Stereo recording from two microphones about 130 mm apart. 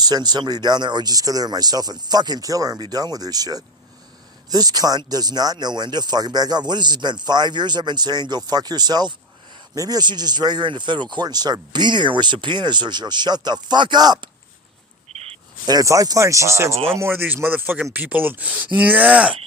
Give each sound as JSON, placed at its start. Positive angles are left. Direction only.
{"t": 0.0, "sound": "speech", "side_deg": -30}
{"t": 15.1, "sound": "a sound", "side_deg": -55}
{"t": 15.6, "sound": "speech", "side_deg": -30}